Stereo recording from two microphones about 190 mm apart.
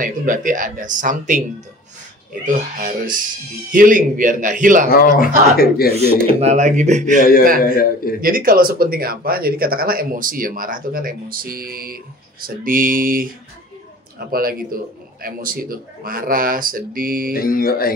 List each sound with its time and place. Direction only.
0.0 s speech: 45° right (ahead or behind)
2.4 s speech: 45° right (ahead or behind)
4.8 s speech: 50° left (ahead or behind)
5.9 s speech: 30° right (ahead or behind)
7.2 s speech: 50° left (ahead or behind)
8.2 s speech: 50° right (ahead or behind)
14.3 s speech: 50° right (ahead or behind)
17.3 s speech: 50° left (ahead or behind)